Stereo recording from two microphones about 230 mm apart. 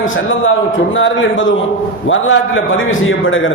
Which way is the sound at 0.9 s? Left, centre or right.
Left.